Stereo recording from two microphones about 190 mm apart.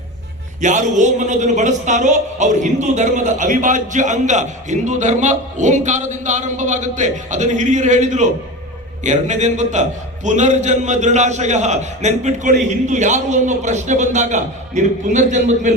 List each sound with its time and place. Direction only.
0.6 s speech: 40° right (ahead or behind)